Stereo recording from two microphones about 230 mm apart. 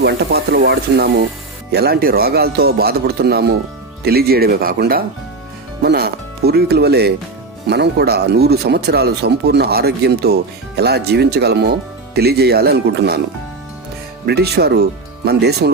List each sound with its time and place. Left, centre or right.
0.0 s speech: right
14.3 s speech: right